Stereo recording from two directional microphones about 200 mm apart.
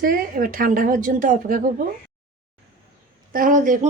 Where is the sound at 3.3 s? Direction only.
45° right (ahead or behind).